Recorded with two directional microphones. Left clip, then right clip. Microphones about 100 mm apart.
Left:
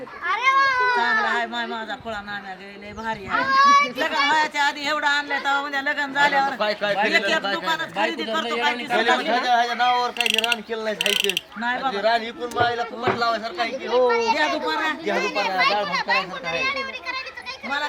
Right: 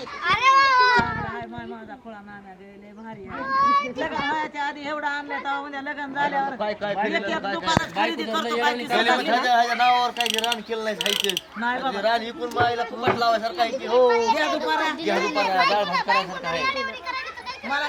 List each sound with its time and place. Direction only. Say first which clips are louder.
0.3 s a sound: right 2 dB; 10° left (ahead or behind)
0.6 s cat: right 2 dB; 10° right (ahead or behind)
1.0 s baby cry: left 8 dB; 20° left (ahead or behind)
3.5 s speech: left 4 dB; 20° left (ahead or behind); by 17.2 s centre (ahead or behind)